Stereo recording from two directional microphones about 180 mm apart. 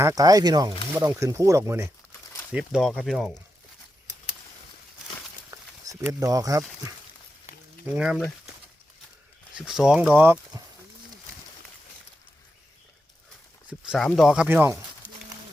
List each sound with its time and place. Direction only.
0.0 s speech: 20° right (ahead or behind)
2.5 s speech: 5° right (ahead or behind)
5.5 s a sound: 15° right (ahead or behind)
7.9 s speech: 5° right (ahead or behind)
9.6 s speech: centre (ahead or behind)
13.7 s speech: 5° right (ahead or behind)